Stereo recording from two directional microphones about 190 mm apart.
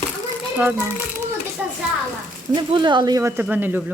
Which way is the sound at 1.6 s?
5° right (ahead or behind).